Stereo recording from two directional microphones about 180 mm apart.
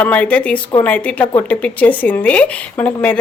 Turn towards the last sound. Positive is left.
turn(degrees=10)  # may be behind; listen again after turning